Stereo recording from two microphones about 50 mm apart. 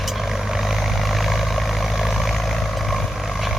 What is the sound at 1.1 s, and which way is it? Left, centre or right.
Vehicle, centre.